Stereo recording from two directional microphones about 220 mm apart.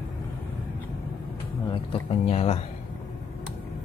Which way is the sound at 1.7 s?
25° left (ahead or behind).